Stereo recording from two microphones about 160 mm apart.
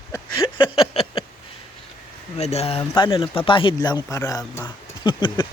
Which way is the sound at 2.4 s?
40° left (ahead or behind).